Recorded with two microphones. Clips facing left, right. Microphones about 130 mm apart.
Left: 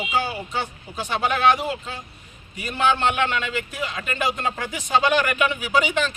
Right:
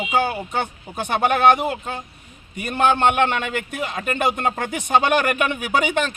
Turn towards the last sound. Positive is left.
turn(degrees=-55)  # may be behind; listen again after turning